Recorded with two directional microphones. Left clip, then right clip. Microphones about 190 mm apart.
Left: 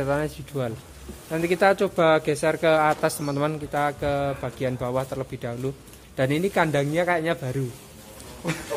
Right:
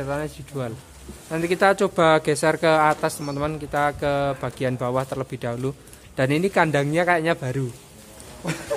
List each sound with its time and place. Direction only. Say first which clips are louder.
0.0 s speech: left 3 dB; 10° left (ahead or behind)
3.7 s speech: right 4 dB; 15° right (ahead or behind)